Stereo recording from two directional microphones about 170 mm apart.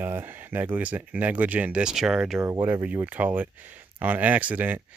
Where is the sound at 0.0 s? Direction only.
10° right (ahead or behind).